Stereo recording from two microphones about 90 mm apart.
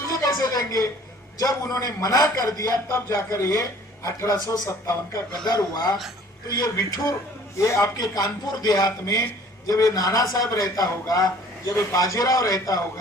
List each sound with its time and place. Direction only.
0.1 s a sound: 40° left (ahead or behind)
1.4 s a man's voice: 40° left (ahead or behind)
5.5 s a man's voice: 45° left (ahead or behind)
7.9 s a man's voice: 45° left (ahead or behind)